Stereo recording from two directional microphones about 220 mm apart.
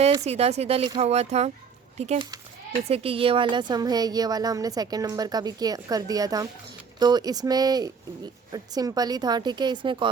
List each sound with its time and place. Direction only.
0.0 s a woman's voice: 25° right (ahead or behind)